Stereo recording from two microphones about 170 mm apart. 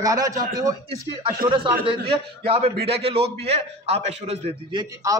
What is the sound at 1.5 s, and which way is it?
A man's voice, 30° right (ahead or behind).